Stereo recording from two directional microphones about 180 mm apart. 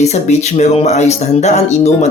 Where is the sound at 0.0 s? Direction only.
40° left (ahead or behind).